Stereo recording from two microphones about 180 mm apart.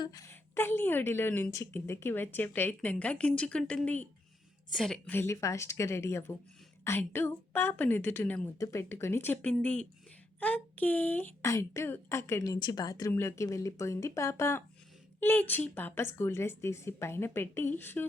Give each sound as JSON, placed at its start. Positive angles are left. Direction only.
{"t": 0.0, "sound": "speech", "side_deg": 20}